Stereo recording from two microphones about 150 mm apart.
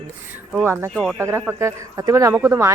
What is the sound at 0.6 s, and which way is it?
A woman's voice, 15° right (ahead or behind).